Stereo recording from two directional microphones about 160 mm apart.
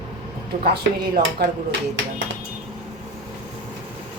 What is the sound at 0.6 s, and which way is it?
Speech, 75° right (ahead or behind).